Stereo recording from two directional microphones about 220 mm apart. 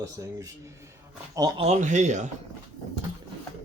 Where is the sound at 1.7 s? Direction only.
35° right (ahead or behind).